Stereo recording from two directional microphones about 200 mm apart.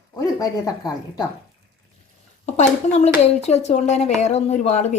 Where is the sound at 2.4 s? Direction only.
35° left (ahead or behind).